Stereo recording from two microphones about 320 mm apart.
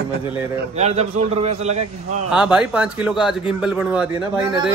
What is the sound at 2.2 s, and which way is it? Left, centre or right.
A man's voice, centre.